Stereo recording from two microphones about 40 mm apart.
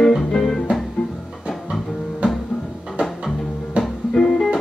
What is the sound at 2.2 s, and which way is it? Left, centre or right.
Music, right.